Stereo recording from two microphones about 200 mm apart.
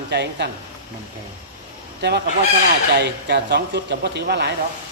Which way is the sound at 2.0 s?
60° right (ahead or behind).